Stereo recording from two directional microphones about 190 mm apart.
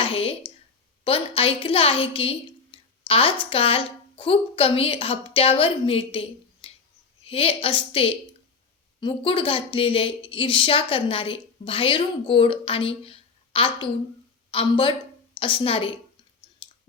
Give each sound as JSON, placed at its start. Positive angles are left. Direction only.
{"t": 0.0, "sound": "a sound", "side_deg": 30}
{"t": 1.0, "sound": "a woman's voice", "side_deg": 30}
{"t": 16.6, "sound": "clicking", "side_deg": 25}